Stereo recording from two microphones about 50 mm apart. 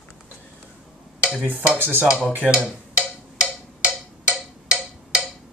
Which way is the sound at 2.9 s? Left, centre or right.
Right.